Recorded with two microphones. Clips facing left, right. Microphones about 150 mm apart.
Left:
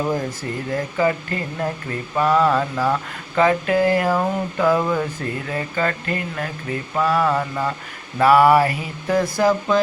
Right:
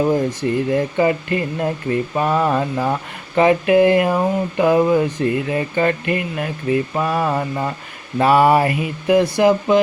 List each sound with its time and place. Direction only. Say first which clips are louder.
0.1 s speech: right 6 dB; 20° right (ahead or behind)